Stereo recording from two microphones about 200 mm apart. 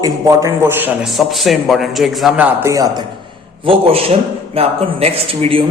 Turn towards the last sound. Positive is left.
turn(degrees=-25)  # may be behind; listen again after turning